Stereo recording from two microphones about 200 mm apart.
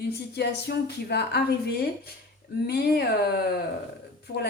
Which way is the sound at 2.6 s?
50° left (ahead or behind).